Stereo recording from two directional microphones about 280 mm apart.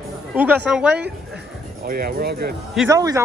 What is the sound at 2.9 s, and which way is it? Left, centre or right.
Speech, centre.